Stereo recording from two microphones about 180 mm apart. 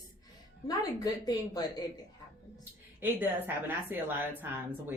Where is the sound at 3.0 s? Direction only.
10° right (ahead or behind).